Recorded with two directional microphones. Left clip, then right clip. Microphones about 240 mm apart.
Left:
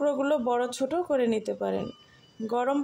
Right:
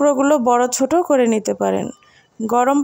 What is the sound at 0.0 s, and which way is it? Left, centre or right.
Speech, right.